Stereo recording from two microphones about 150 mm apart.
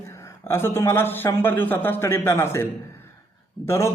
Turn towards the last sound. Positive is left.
turn(degrees=20)  # may be behind; listen again after turning